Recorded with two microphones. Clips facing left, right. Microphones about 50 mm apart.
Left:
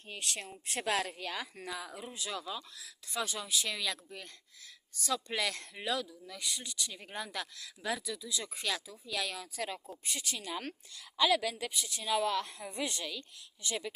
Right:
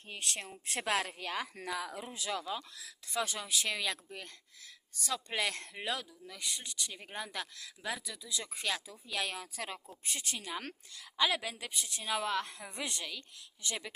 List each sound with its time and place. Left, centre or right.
0.3 s speech: right
1.5 s speech: right
2.6 s speech: right
5.0 s speech: right
7.8 s speech: centre
8.0 s a woman's voice: right